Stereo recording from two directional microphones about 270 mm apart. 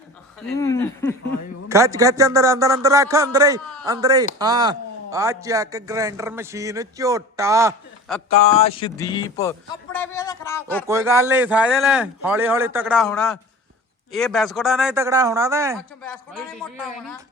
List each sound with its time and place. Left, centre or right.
0.6 s a man's voice: centre
1.7 s a man's voice: centre
8.1 s speech: centre
8.5 s a sound: left
9.4 s a man's voice: centre
10.8 s speech: centre
16.0 s speech: centre